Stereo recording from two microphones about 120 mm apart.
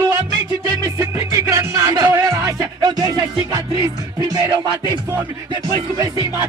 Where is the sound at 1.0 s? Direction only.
30° right (ahead or behind).